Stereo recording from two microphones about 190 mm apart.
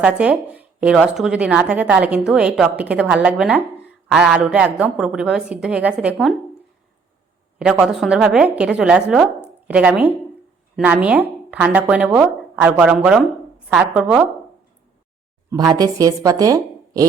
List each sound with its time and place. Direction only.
0.0 s speech: 5° right (ahead or behind)
7.6 s speech: 5° right (ahead or behind)
15.4 s speech: 20° right (ahead or behind)